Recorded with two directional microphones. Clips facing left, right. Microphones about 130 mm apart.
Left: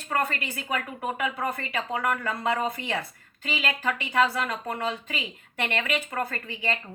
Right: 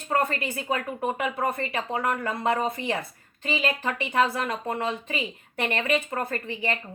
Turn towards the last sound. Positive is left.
turn(degrees=-25)  # may be behind; listen again after turning